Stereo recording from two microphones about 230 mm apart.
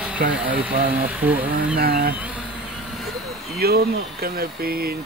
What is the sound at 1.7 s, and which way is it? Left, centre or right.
Speech, right.